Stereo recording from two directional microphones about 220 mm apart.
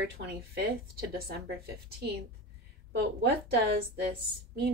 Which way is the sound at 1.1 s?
45° right (ahead or behind).